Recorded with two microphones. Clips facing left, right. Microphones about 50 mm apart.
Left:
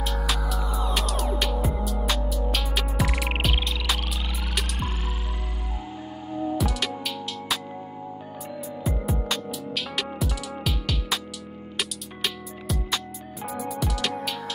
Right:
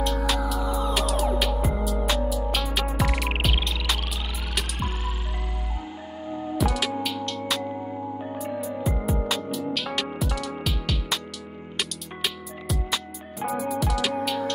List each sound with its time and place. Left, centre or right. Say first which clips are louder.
0.0 s music: right 3 dB; centre
6.6 s music: right 3 dB; centre
8.9 s music: even; centre